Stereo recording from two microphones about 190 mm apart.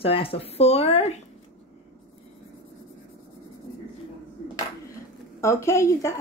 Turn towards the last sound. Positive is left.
turn(degrees=15)  # may be behind; listen again after turning